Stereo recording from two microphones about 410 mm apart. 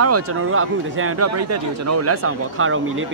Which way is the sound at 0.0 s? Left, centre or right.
Right.